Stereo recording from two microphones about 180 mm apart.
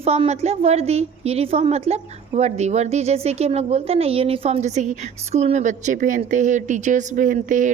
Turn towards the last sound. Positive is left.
turn(degrees=-45)  # may be behind; listen again after turning